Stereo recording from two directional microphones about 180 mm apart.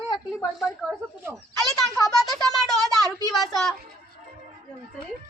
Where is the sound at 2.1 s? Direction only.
Centre (ahead or behind).